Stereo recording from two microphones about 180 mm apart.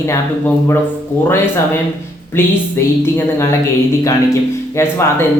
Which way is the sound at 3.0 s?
15° left (ahead or behind).